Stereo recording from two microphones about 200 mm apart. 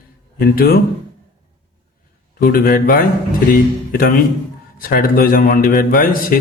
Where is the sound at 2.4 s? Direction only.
45° left (ahead or behind).